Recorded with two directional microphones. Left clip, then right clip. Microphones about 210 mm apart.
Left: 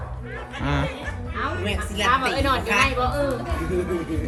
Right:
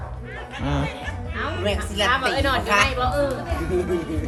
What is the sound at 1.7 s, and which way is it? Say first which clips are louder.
A woman's voice: right 1 dB; centre (ahead or behind).